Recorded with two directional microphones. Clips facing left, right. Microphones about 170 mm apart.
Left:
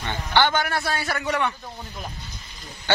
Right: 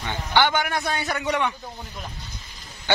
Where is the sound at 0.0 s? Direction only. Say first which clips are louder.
Even; 10° right (ahead or behind).